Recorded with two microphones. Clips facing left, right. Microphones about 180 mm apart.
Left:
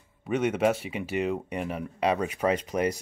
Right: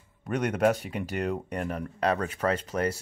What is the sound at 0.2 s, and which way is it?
Speech, 5° left (ahead or behind).